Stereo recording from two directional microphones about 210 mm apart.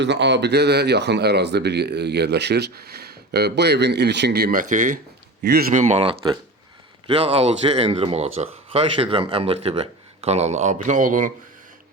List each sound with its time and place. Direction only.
0.0 s speech: 55° right (ahead or behind)
4.7 s speech: 35° right (ahead or behind)
5.4 s speech: 50° right (ahead or behind)
5.8 s speech: 30° right (ahead or behind)